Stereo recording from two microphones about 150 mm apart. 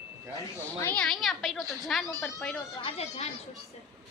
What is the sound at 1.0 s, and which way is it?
A woman's voice, centre (ahead or behind).